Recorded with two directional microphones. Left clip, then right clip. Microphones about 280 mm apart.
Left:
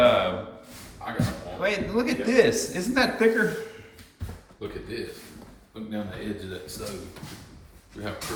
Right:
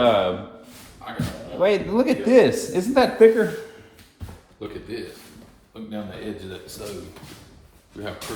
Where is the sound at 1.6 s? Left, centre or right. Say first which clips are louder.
Right 6 dB; centre.